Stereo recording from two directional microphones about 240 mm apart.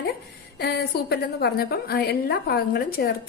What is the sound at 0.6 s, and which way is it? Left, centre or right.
A woman's voice, left.